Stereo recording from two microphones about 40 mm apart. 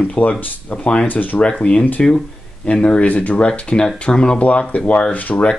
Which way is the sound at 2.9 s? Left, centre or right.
Left.